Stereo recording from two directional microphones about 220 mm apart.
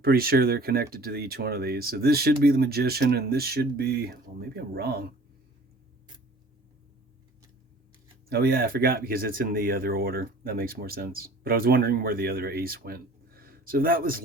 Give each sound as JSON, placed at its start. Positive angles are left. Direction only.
{"t": 0.0, "sound": "speech", "side_deg": -45}
{"t": 8.3, "sound": "speech", "side_deg": -45}